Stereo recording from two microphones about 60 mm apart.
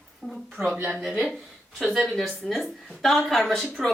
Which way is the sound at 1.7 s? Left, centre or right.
Centre.